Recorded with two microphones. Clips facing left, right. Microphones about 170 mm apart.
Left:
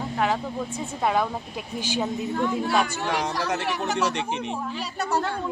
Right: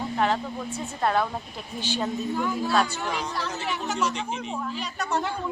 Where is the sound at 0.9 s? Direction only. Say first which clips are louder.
Left 1 dB; 10° left (ahead or behind).